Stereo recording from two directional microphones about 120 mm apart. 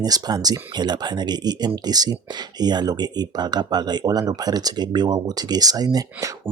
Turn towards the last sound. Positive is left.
turn(degrees=-30)  # may be behind; listen again after turning